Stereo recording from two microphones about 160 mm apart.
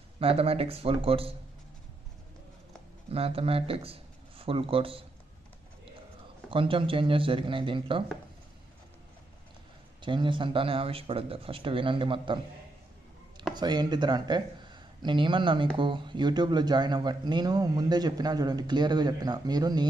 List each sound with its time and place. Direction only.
0.2 s speech: 35° right (ahead or behind)
3.1 s speech: 35° right (ahead or behind)
6.5 s speech: 35° right (ahead or behind)
10.0 s speech: 30° right (ahead or behind)
13.6 s a man's voice: 25° right (ahead or behind)